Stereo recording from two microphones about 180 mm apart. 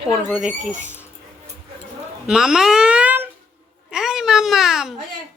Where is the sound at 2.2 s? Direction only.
5° right (ahead or behind).